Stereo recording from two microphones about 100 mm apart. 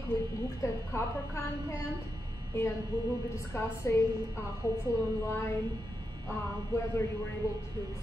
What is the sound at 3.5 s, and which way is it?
Speech, 25° left (ahead or behind).